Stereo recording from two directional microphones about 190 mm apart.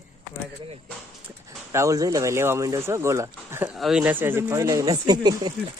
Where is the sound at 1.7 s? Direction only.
15° right (ahead or behind).